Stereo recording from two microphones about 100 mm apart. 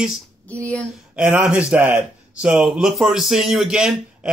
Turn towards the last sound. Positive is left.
turn(degrees=-5)  # may be behind; listen again after turning